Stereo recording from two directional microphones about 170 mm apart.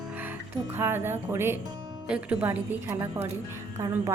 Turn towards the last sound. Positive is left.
turn(degrees=-20)  # may be behind; listen again after turning